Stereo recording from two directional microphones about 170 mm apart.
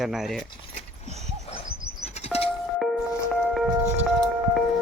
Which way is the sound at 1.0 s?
40° right (ahead or behind).